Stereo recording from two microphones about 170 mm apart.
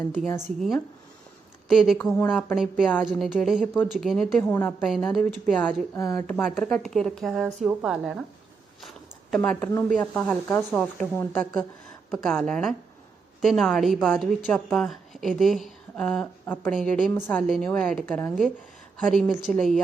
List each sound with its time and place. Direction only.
1.6 s speech: centre (ahead or behind)
2.0 s speech: 10° left (ahead or behind)
2.5 s speech: 5° right (ahead or behind)
6.0 s speech: 20° left (ahead or behind)
6.2 s speech: centre (ahead or behind)
8.8 s a sound: centre (ahead or behind)
9.9 s speech: 5° left (ahead or behind)